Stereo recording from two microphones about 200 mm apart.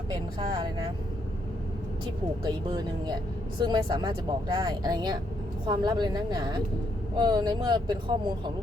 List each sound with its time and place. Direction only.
0.1 s speech: 20° right (ahead or behind)
2.4 s speech: 20° right (ahead or behind)